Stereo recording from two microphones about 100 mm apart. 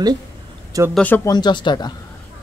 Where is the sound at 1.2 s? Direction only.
45° left (ahead or behind).